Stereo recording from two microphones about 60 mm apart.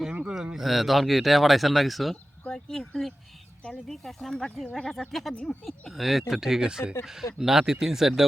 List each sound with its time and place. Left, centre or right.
0.1 s a sound: right
0.5 s speech: centre
2.5 s speech: centre